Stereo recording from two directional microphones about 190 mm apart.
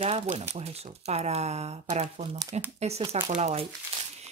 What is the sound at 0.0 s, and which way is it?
Speech, 35° right (ahead or behind).